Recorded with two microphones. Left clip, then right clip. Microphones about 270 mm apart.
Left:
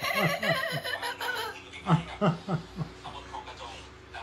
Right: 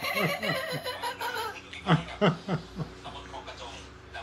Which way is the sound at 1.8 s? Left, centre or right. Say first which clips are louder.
Right 2 dB; centre.